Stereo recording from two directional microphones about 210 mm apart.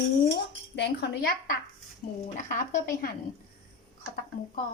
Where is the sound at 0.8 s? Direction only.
50° left (ahead or behind).